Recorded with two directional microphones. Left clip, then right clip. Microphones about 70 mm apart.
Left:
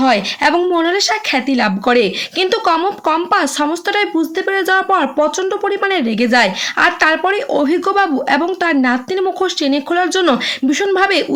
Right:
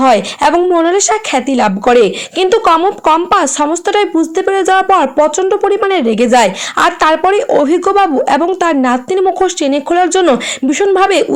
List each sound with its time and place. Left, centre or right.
0.0 s speech: right
0.5 s speech: right
0.9 s speech: right